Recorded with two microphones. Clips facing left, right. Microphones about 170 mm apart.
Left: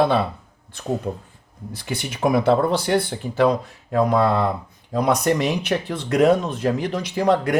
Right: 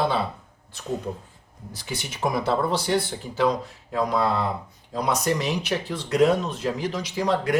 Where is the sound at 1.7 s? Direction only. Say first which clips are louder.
Left 5 dB; 60° left (ahead or behind).